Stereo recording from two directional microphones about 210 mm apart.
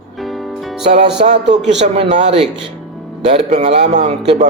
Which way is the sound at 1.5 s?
35° right (ahead or behind).